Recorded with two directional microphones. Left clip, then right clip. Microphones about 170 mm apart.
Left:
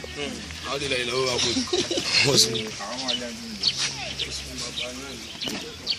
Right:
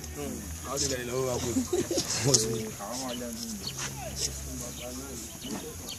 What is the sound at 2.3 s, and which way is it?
Speech, centre (ahead or behind).